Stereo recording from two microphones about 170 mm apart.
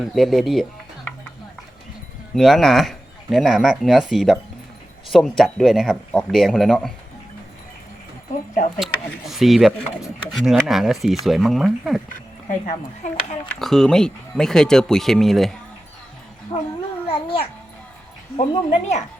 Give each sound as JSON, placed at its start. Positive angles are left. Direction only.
{"t": 0.0, "sound": "speech", "side_deg": 0}
{"t": 2.3, "sound": "speech", "side_deg": 0}
{"t": 8.8, "sound": "speech", "side_deg": 0}
{"t": 12.0, "sound": "speech", "side_deg": 50}
{"t": 13.6, "sound": "speech", "side_deg": 0}
{"t": 16.5, "sound": "babbling", "side_deg": 30}
{"t": 17.1, "sound": "a child's voice", "side_deg": 30}
{"t": 18.7, "sound": "speech", "side_deg": 40}